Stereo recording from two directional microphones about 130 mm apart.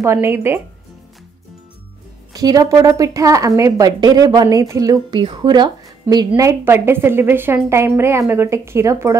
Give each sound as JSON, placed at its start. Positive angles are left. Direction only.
{"t": 0.0, "sound": "speech", "side_deg": -20}
{"t": 2.3, "sound": "speech", "side_deg": -30}
{"t": 5.2, "sound": "speech", "side_deg": -35}